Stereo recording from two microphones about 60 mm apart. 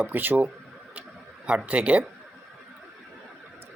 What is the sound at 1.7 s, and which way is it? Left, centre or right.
Speech, right.